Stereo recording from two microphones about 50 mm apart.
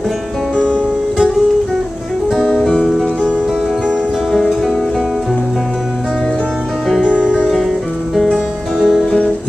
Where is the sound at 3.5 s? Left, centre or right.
Centre.